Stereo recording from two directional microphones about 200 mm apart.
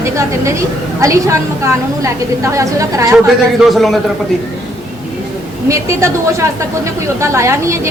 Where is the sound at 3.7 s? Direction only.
Centre (ahead or behind).